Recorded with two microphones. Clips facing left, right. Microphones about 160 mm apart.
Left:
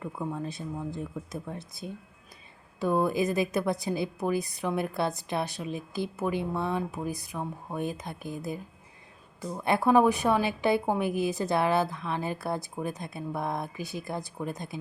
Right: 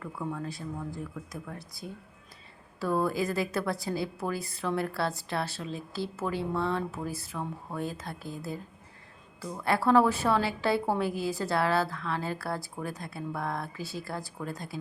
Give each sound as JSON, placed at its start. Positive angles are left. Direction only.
{"t": 0.0, "sound": "a woman's voice", "side_deg": 20}